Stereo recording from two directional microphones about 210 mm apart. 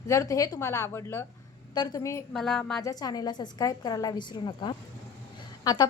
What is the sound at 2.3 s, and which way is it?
Speech, centre (ahead or behind).